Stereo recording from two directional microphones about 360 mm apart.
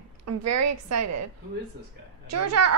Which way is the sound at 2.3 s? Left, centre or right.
Right.